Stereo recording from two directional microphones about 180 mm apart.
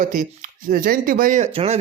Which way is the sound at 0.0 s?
45° right (ahead or behind).